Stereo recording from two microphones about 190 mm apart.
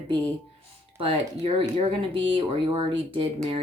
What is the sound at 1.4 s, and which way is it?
Speech, 30° right (ahead or behind).